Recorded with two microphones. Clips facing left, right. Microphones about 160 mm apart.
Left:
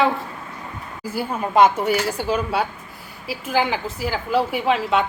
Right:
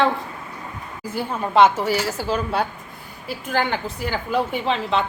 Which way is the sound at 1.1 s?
10° left (ahead or behind).